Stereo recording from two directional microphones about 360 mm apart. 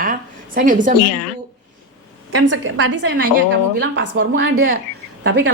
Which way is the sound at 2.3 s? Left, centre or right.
Right.